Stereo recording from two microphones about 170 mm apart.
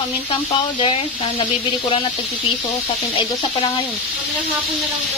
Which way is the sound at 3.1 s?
35° left (ahead or behind).